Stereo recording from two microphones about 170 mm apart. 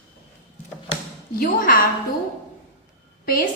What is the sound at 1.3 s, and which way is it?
Speech, 60° left (ahead or behind).